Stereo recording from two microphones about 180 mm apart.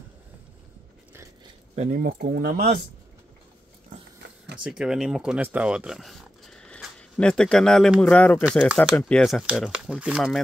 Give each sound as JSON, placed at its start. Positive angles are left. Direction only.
{"t": 2.0, "sound": "speech", "side_deg": -60}
{"t": 4.6, "sound": "speech", "side_deg": -5}
{"t": 8.6, "sound": "speech", "side_deg": -5}